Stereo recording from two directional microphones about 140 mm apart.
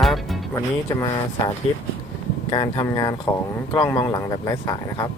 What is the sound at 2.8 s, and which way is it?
Speech, 25° left (ahead or behind).